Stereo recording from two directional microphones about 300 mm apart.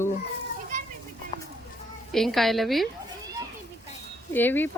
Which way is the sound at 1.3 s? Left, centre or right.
Centre.